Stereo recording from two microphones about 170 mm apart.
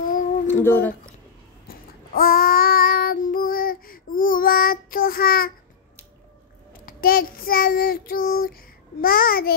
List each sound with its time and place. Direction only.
0.5 s speech: 10° left (ahead or behind)
1.7 s child singing: 60° left (ahead or behind)
6.9 s child singing: 60° left (ahead or behind)